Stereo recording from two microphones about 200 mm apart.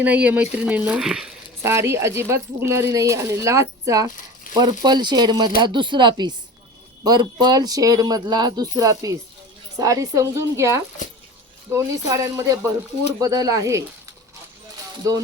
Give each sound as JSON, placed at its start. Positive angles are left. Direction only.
{"t": 0.0, "sound": "speech", "side_deg": -5}